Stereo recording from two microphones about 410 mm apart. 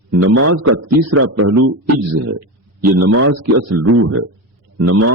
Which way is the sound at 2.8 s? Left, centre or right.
Right.